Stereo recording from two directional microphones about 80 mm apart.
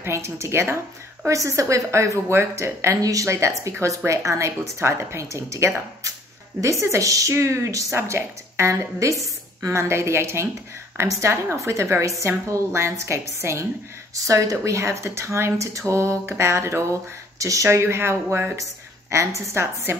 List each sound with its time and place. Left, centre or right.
0.0 s speech: right
17.6 s speech: right